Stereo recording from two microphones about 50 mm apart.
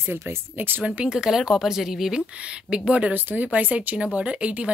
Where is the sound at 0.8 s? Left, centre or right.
Right.